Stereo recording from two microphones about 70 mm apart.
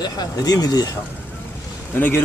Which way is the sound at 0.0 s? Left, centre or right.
Left.